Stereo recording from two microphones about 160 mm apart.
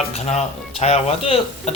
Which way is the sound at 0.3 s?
45° left (ahead or behind).